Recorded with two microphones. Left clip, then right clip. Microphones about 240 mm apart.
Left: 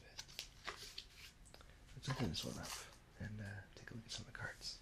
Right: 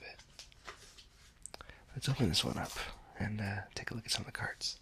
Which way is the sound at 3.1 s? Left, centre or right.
Right.